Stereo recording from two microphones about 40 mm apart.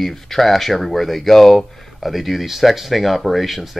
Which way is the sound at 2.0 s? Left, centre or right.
Centre.